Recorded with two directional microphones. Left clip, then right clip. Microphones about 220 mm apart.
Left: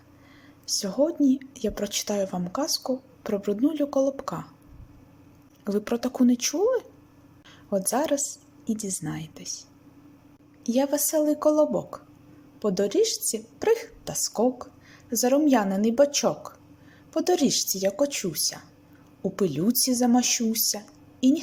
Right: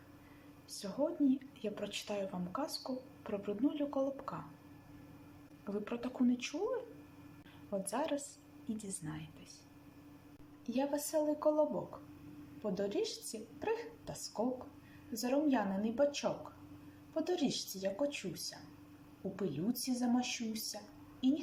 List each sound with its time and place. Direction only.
0.8 s a woman's voice: 30° left (ahead or behind)
5.6 s a woman's voice: 30° left (ahead or behind)
10.6 s a woman's voice: 35° left (ahead or behind)
12.6 s a woman's voice: 35° left (ahead or behind)